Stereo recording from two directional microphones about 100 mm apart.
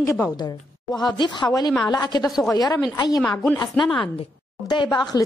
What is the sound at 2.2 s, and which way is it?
Speech, centre (ahead or behind).